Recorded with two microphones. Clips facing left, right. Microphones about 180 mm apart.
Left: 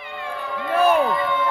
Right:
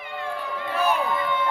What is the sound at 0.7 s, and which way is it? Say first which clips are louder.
Speech: left 7 dB; 50° left (ahead or behind).